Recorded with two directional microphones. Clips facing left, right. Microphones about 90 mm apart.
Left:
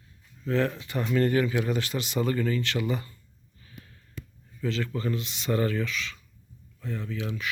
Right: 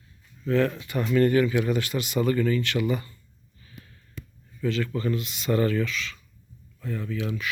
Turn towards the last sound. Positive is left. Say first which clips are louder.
# right 3 dB
turn(degrees=25)  # may be behind; listen again after turning